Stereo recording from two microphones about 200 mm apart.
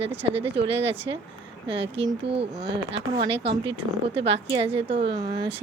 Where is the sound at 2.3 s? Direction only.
30° right (ahead or behind).